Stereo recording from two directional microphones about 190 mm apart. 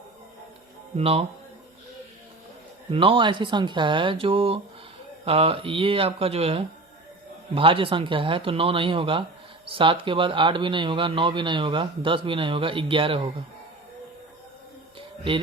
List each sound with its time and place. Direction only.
0.9 s speech: 30° right (ahead or behind)
2.9 s speech: 30° right (ahead or behind)